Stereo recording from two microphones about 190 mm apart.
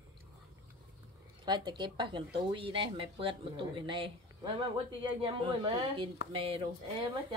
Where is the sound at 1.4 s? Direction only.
25° right (ahead or behind).